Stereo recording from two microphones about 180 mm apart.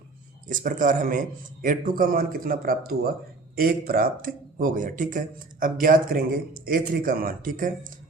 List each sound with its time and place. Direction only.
0.4 s speech: 50° right (ahead or behind)